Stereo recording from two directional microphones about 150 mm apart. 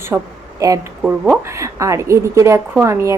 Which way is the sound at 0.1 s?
15° right (ahead or behind).